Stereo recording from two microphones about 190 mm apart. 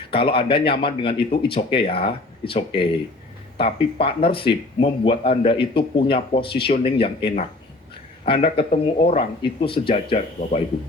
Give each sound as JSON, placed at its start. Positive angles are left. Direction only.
{"t": 0.1, "sound": "speech", "side_deg": 30}